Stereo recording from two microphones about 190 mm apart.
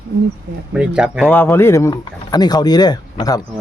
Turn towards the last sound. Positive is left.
turn(degrees=20)  # may be behind; listen again after turning